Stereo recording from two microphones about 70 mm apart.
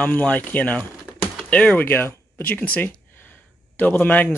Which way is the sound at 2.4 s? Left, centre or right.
Left.